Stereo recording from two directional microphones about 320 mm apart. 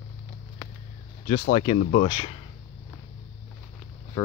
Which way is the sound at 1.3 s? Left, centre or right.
Left.